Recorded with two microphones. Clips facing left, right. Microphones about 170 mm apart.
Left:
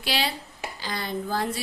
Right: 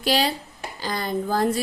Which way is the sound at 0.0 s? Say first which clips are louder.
Right 6 dB; 45° right (ahead or behind).